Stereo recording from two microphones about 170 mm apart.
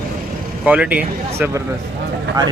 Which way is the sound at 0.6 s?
5° right (ahead or behind).